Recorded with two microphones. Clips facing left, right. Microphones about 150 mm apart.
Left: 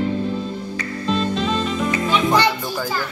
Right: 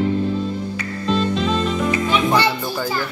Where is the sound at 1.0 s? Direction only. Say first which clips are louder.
Right 2 dB; centre (ahead or behind).